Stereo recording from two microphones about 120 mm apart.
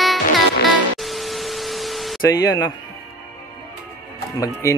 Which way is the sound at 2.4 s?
35° left (ahead or behind).